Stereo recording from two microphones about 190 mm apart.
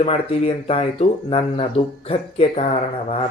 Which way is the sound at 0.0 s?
30° left (ahead or behind).